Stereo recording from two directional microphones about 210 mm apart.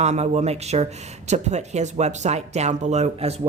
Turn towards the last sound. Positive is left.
turn(degrees=-30)  # may be behind; listen again after turning